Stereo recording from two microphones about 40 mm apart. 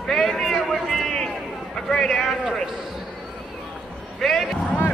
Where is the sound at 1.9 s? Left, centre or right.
Centre.